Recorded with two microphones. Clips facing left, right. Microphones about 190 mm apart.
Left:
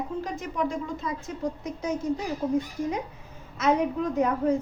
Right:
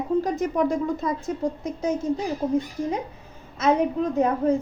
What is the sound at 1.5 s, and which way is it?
Speech, 25° right (ahead or behind).